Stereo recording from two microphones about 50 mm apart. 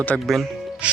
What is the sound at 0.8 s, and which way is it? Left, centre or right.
Mechanisms, right.